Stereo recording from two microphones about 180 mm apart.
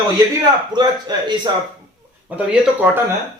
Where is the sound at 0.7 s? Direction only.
25° right (ahead or behind).